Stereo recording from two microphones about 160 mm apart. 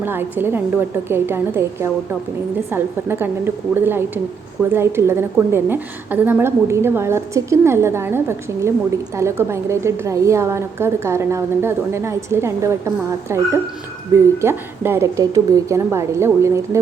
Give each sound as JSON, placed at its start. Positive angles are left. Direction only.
{"t": 0.0, "sound": "a woman's voice", "side_deg": -15}